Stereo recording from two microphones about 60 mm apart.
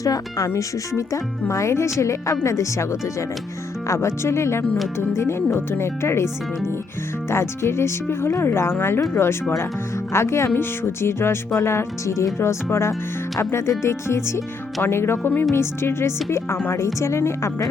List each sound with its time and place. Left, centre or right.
0.0 s speech: left